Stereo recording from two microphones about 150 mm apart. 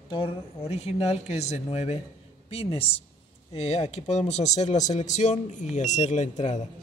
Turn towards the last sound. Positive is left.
turn(degrees=50)  # may be behind; listen again after turning